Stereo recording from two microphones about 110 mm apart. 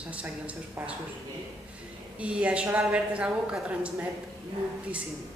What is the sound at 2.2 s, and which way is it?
A woman's voice, 10° right (ahead or behind).